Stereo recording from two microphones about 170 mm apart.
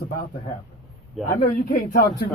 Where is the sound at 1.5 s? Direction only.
60° left (ahead or behind).